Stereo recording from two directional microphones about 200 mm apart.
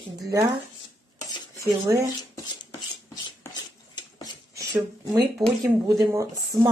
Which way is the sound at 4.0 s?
20° left (ahead or behind).